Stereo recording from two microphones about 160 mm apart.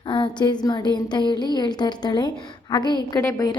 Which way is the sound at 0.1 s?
30° left (ahead or behind).